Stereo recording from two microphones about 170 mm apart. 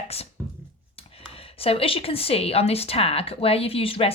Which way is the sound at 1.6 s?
35° left (ahead or behind).